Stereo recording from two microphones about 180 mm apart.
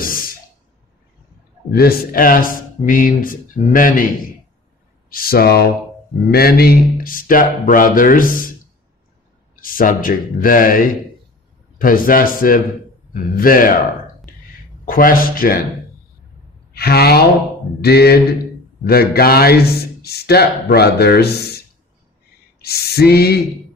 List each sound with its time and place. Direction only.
0.0 s a sound: 50° left (ahead or behind)
1.7 s speech: 60° left (ahead or behind)
5.1 s a man's voice: 55° left (ahead or behind)
9.6 s speech: 50° left (ahead or behind)
14.9 s speech: 50° left (ahead or behind)
16.7 s a man's voice: 60° left (ahead or behind)
22.6 s a sound: 60° left (ahead or behind)